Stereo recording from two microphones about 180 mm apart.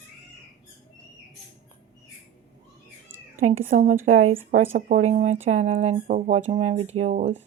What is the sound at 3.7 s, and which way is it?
Speech, 45° right (ahead or behind).